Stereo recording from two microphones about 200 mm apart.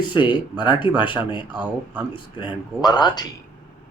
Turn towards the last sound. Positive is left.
turn(degrees=20)  # may be behind; listen again after turning